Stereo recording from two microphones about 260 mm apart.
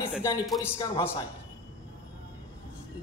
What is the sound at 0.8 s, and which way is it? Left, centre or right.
Speech, centre.